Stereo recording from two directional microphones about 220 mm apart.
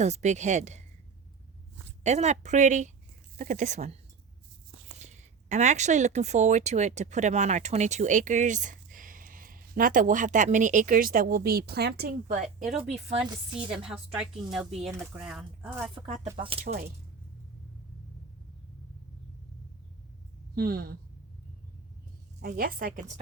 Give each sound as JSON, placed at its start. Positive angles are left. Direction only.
{"t": 0.0, "sound": "speech", "side_deg": -30}
{"t": 2.0, "sound": "speech", "side_deg": -30}
{"t": 4.9, "sound": "speech", "side_deg": -30}
{"t": 14.1, "sound": "speech", "side_deg": -5}
{"t": 16.3, "sound": "speech", "side_deg": -25}
{"t": 16.6, "sound": "speech", "side_deg": -45}
{"t": 20.6, "sound": "speech", "side_deg": -40}
{"t": 22.4, "sound": "speech", "side_deg": -40}